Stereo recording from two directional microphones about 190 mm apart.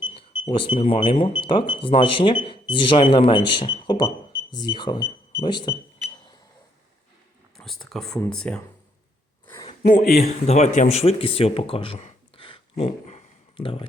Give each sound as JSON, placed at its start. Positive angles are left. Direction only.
{"t": 0.0, "sound": "speech", "side_deg": 25}
{"t": 7.5, "sound": "speech", "side_deg": 0}
{"t": 9.5, "sound": "a sound", "side_deg": 20}
{"t": 9.8, "sound": "speech", "side_deg": 50}
{"t": 10.2, "sound": "speech", "side_deg": 35}